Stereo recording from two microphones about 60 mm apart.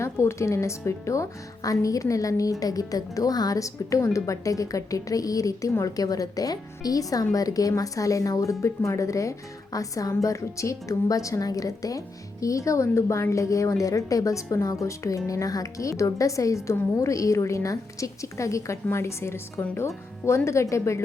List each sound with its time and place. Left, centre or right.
0.0 s a woman's voice: left
5.8 s a woman's voice: left
7.7 s a woman's voice: left
9.7 s a woman's voice: left
10.1 s a woman's voice: left
18.9 s a woman's voice: left